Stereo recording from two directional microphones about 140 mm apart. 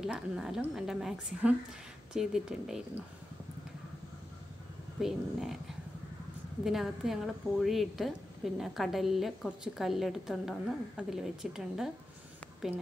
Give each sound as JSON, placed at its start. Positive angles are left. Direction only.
{"t": 0.0, "sound": "a woman's voice", "side_deg": -5}
{"t": 5.0, "sound": "a woman's voice", "side_deg": 0}